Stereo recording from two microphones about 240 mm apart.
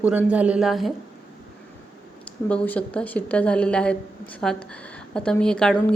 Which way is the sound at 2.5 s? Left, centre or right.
Centre.